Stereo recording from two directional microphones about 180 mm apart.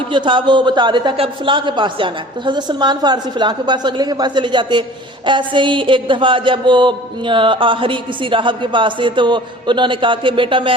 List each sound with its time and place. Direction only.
0.1 s a man's voice: 25° right (ahead or behind)